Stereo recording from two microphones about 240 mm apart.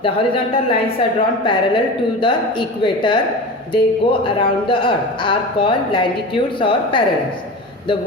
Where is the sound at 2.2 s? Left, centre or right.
Centre.